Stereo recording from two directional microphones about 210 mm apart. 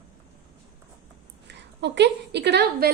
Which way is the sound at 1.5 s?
55° right (ahead or behind).